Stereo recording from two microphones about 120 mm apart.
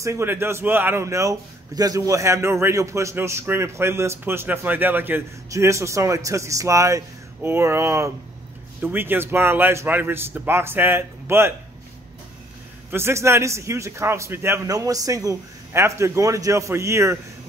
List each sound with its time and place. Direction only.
0.0 s a man's voice: 20° right (ahead or behind)
12.9 s a man's voice: 20° right (ahead or behind)